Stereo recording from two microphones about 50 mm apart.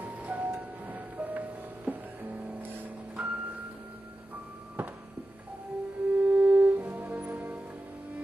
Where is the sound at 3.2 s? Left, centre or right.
Right.